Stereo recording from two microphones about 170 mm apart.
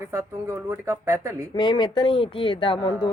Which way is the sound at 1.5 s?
30° left (ahead or behind).